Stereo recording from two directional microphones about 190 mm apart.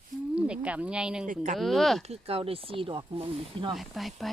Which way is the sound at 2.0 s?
35° right (ahead or behind).